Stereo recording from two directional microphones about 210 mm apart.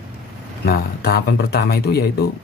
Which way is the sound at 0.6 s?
50° left (ahead or behind).